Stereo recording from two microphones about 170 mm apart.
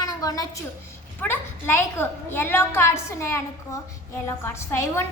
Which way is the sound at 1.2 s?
15° left (ahead or behind).